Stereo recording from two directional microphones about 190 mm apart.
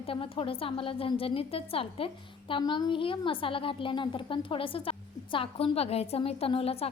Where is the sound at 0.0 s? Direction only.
30° left (ahead or behind).